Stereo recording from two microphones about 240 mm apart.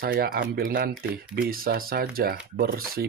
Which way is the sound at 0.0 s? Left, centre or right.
Right.